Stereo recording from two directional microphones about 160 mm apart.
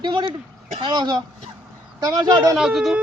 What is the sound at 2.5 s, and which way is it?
Speech, centre (ahead or behind).